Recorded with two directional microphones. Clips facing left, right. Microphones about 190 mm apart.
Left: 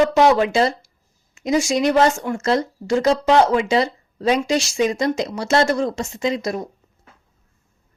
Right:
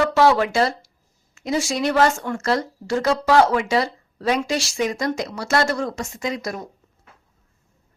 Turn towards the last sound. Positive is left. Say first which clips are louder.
# left 5 dB
turn(degrees=25)  # may be behind; listen again after turning